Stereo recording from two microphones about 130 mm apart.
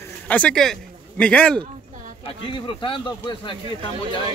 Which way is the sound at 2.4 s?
40° left (ahead or behind).